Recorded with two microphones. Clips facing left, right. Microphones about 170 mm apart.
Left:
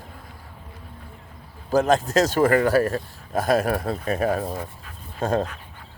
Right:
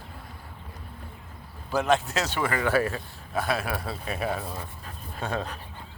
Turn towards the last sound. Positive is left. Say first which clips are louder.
# left 8 dB
turn(degrees=45)  # may be behind; listen again after turning